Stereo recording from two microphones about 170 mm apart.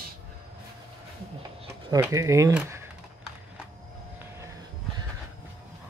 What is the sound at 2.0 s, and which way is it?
Speech, 20° right (ahead or behind).